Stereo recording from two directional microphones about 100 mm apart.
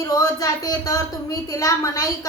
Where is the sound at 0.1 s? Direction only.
35° left (ahead or behind).